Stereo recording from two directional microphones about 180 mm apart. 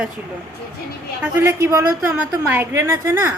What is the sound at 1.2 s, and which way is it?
A woman's voice, 15° right (ahead or behind).